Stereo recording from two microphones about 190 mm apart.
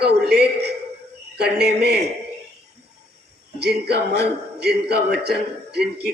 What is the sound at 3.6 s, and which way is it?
Speech, 60° right (ahead or behind).